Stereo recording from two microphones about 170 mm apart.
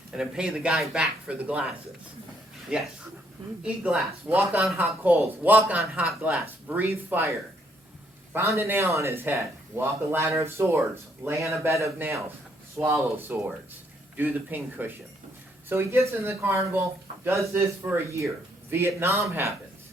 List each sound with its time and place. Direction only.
0.1 s speech: 5° right (ahead or behind)
2.7 s speech: 5° right (ahead or behind)